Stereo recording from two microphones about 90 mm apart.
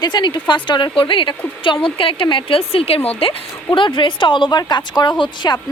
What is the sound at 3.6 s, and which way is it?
A woman's voice, 60° left (ahead or behind).